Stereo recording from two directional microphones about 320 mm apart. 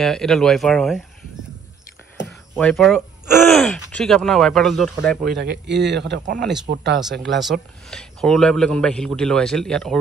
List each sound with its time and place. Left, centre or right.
0.0 s a man's voice: centre
2.2 s speech: centre
5.4 s speech: right
6.4 s a man's voice: centre
6.7 s speech: right
7.4 s a man's voice: centre